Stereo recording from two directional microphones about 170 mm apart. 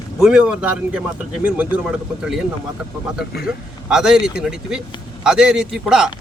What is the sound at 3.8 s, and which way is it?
A man's voice, 5° right (ahead or behind).